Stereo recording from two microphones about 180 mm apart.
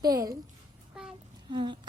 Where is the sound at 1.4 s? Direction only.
25° right (ahead or behind).